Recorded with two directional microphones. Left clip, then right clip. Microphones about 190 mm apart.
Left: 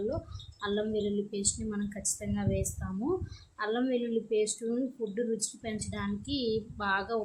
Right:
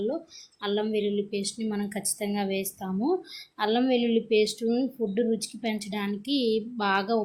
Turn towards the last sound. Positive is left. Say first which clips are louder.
# right 5 dB
turn(degrees=-15)  # may be behind; listen again after turning